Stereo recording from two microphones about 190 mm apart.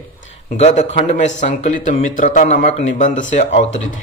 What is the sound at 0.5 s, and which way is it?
Speech, 35° left (ahead or behind).